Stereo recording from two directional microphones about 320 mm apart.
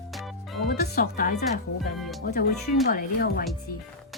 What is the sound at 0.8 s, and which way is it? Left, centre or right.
Speech, left.